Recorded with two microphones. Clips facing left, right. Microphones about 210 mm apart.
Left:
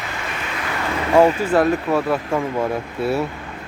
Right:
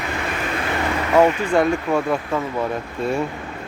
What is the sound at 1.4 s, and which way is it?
Speech, 5° left (ahead or behind).